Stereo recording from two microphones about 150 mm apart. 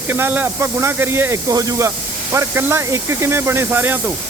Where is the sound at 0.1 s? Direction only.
15° right (ahead or behind).